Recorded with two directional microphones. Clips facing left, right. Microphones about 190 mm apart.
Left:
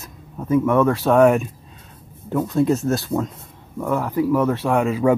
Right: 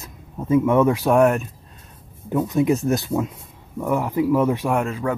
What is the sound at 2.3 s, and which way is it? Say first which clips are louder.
Speech: even; 15° right (ahead or behind).